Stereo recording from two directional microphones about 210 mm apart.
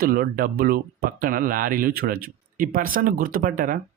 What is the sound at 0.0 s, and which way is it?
Speech, 45° right (ahead or behind).